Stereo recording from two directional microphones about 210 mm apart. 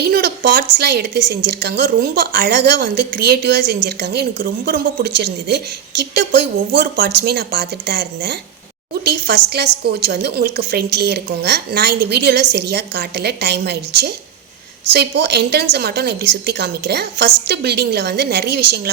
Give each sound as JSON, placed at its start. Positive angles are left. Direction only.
{"t": 0.0, "sound": "a woman's voice", "side_deg": -45}